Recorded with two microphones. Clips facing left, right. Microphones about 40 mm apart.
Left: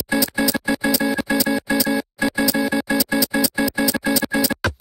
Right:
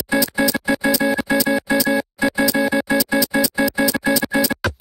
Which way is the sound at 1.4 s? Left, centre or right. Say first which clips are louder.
Right 2 dB; centre.